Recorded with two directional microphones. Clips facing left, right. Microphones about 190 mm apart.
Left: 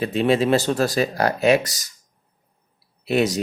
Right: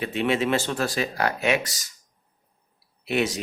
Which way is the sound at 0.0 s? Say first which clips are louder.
Left 5 dB; 35° left (ahead or behind).